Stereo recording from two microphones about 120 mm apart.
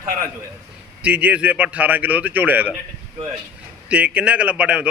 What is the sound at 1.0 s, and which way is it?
Speech, 10° right (ahead or behind).